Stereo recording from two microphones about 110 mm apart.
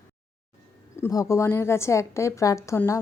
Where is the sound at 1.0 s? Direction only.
30° left (ahead or behind).